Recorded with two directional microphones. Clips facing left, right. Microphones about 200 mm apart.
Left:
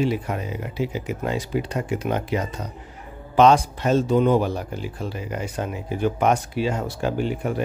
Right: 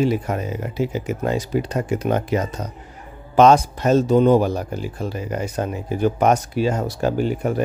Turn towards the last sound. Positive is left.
turn(degrees=-40)  # may be behind; listen again after turning